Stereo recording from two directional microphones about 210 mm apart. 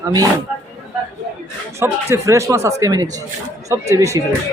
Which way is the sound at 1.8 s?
15° right (ahead or behind).